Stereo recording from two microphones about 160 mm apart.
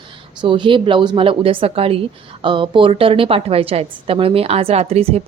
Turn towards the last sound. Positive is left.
turn(degrees=-40)  # may be behind; listen again after turning